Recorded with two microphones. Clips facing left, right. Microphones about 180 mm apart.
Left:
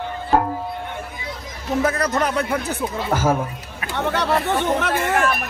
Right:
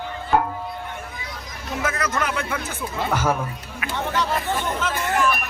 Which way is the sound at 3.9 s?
65° left (ahead or behind).